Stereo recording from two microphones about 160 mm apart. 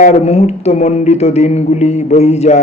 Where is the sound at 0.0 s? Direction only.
45° left (ahead or behind).